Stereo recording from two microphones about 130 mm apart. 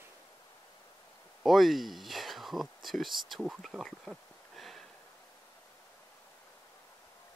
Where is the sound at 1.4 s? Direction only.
Centre (ahead or behind).